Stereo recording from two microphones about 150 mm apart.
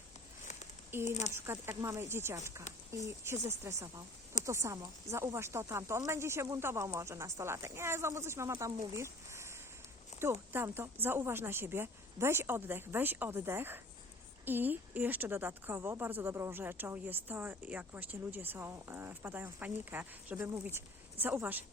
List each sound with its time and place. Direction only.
0.9 s a woman's voice: 15° right (ahead or behind)